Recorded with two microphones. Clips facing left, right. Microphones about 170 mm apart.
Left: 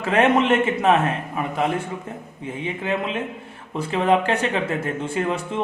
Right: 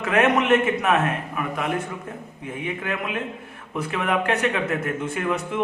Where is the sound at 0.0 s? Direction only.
30° left (ahead or behind).